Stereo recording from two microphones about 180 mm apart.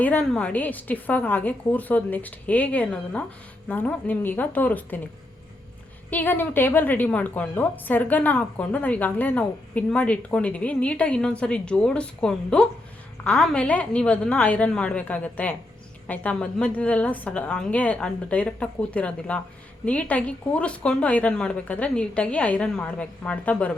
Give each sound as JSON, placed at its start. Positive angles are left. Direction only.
{"t": 0.0, "sound": "a woman's voice", "side_deg": 5}
{"t": 6.1, "sound": "a woman's voice", "side_deg": 10}